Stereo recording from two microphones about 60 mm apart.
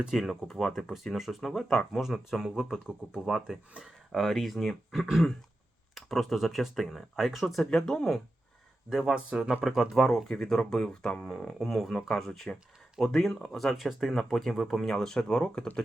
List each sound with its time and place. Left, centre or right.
0.1 s speech: centre
4.1 s speech: centre
8.9 s speech: centre
9.9 s speech: centre